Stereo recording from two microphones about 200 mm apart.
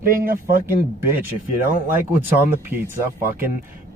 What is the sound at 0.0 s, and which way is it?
Speech, 45° right (ahead or behind).